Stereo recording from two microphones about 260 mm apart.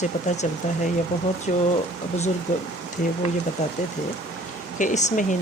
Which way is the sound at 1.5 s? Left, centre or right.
Left.